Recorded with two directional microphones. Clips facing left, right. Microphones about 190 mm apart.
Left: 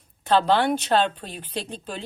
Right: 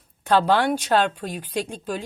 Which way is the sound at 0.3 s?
10° right (ahead or behind).